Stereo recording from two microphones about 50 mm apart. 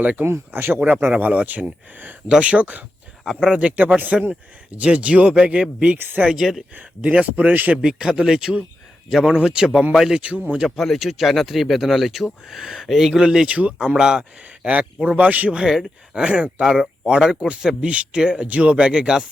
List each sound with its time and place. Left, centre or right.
0.0 s speech: right
0.5 s speech: right
1.1 s speech: right
2.3 s speech: right
6.3 s speech: centre
6.7 s speech: right
7.9 s speech: centre
10.2 s speech: right
10.8 s speech: centre
15.0 s speech: right
15.6 s speech: centre
16.2 s speech: right
16.6 s speech: centre